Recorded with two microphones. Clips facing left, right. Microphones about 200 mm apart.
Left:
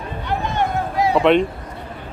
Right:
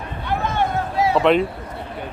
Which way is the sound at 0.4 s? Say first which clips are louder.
Even; 15° left (ahead or behind).